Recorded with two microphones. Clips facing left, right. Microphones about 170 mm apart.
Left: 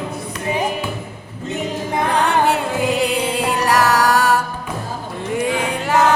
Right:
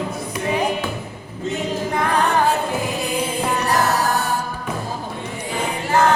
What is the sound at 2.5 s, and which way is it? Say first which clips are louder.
Music: left 3 dB; 90° left.